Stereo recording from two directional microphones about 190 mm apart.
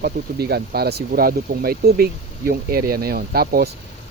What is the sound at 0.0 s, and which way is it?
Speech, 55° right (ahead or behind).